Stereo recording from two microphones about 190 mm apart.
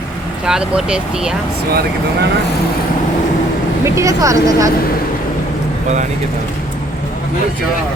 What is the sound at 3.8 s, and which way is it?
Speech, 15° right (ahead or behind).